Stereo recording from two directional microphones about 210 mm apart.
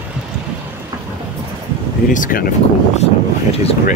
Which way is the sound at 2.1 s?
40° left (ahead or behind).